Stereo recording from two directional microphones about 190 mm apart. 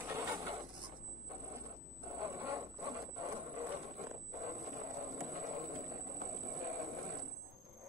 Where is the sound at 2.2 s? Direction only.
15° right (ahead or behind).